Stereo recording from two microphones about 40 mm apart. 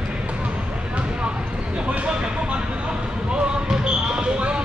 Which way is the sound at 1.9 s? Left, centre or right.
Right.